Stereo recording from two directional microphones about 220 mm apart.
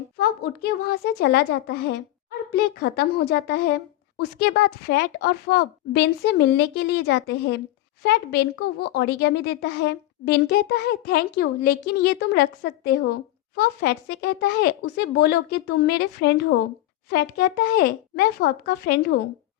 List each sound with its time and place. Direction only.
0.2 s a woman's voice: 45° left (ahead or behind)